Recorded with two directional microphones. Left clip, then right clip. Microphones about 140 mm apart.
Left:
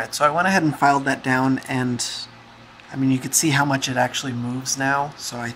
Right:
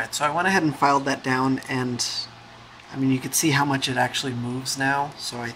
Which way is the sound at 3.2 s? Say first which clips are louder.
Left 2 dB; 15° left (ahead or behind).